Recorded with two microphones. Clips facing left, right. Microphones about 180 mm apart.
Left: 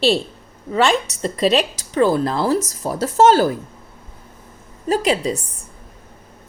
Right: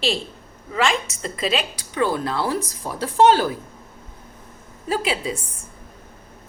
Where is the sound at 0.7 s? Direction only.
35° left (ahead or behind).